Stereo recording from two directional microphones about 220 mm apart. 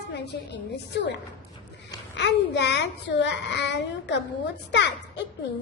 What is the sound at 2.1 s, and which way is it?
A woman's voice, 50° left (ahead or behind).